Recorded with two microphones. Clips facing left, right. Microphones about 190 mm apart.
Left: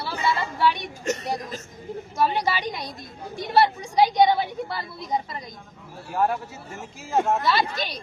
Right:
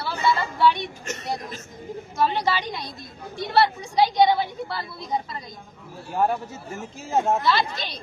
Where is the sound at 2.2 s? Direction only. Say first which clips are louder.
Even; 15° left (ahead or behind).